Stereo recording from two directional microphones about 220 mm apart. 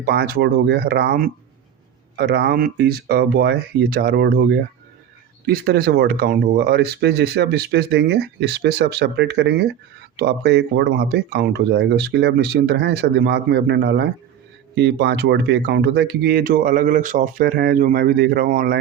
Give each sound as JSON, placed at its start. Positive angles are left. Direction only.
{"t": 0.0, "sound": "speech", "side_deg": -45}